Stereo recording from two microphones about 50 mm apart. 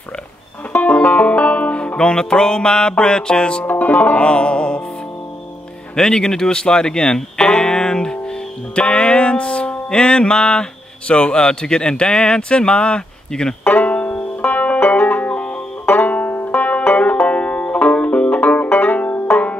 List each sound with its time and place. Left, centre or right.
0.7 s banjo: left
3.6 s music: left
5.9 s speech: centre
8.7 s music: left
11.1 s speech: centre
13.7 s banjo: left
19.2 s music: left